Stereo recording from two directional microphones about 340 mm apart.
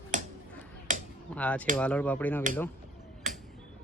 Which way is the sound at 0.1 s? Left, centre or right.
Right.